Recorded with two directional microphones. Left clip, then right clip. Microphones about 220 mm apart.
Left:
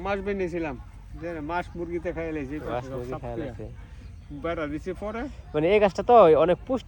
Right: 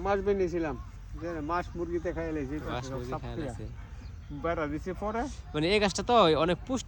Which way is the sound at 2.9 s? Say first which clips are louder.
Left 4 dB; centre (ahead or behind).